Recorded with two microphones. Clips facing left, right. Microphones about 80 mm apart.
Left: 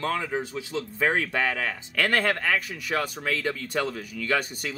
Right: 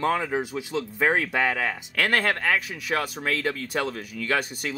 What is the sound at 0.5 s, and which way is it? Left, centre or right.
Speech, centre.